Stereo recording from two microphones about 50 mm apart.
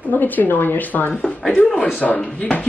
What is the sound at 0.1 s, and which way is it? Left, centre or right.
Speech, left.